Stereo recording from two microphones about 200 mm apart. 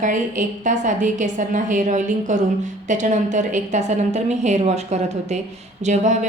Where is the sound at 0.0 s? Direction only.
40° right (ahead or behind).